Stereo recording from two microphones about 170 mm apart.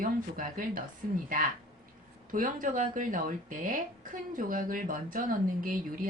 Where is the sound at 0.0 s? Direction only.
50° right (ahead or behind).